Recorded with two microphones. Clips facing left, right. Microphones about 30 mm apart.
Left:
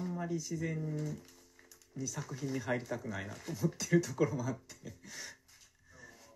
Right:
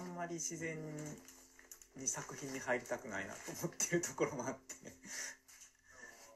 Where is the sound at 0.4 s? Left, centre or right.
Left.